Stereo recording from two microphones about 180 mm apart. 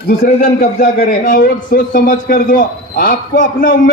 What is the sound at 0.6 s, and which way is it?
A man's voice, 45° left (ahead or behind).